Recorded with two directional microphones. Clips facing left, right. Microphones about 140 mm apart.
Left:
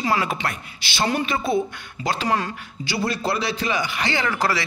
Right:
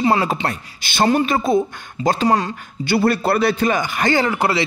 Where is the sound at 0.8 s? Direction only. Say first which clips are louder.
Right 7 dB; 50° right (ahead or behind); by 2.4 s 35° right (ahead or behind).